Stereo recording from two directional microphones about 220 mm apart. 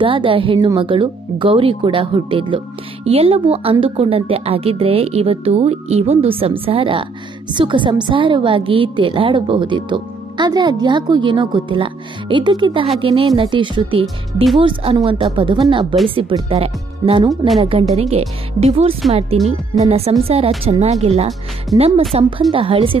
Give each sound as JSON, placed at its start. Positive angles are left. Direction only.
{"t": 0.0, "sound": "a woman's voice", "side_deg": -25}
{"t": 14.0, "sound": "speech", "side_deg": 0}
{"t": 14.6, "sound": "a woman's voice", "side_deg": -25}
{"t": 19.3, "sound": "a woman's voice", "side_deg": -25}